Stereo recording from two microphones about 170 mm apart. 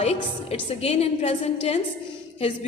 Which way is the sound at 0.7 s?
35° left (ahead or behind).